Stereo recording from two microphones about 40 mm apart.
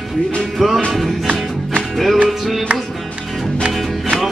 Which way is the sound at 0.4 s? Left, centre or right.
Centre.